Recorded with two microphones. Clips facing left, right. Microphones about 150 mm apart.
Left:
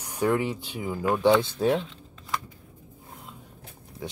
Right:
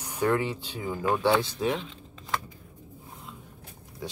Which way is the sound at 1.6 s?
40° left (ahead or behind).